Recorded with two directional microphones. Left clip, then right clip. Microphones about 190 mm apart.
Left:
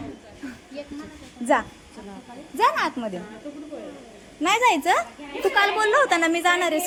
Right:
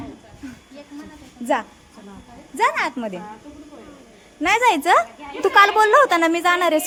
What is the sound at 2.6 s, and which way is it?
Speech, 25° right (ahead or behind).